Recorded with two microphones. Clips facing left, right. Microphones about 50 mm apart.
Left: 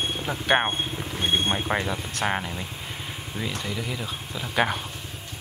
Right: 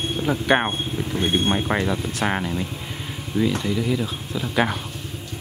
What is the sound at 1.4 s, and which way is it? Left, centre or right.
Speech, centre.